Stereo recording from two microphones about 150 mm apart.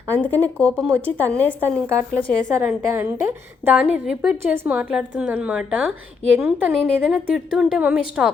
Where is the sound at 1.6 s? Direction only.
15° right (ahead or behind).